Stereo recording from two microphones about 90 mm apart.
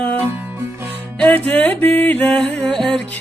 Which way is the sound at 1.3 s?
20° left (ahead or behind).